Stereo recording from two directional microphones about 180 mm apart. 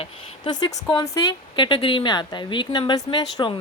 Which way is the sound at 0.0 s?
25° left (ahead or behind).